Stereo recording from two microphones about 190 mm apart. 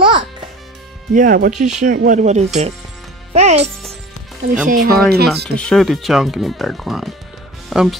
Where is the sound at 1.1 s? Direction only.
45° right (ahead or behind).